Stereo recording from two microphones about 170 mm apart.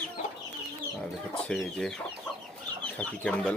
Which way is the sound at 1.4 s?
5° left (ahead or behind).